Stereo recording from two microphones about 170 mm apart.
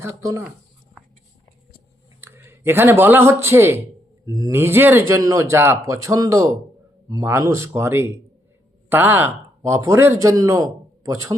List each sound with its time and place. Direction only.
0.0 s speech: 20° right (ahead or behind)
2.2 s speech: 15° right (ahead or behind)